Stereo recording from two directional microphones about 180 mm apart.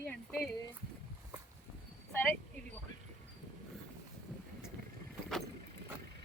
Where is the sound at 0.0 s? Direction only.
10° left (ahead or behind).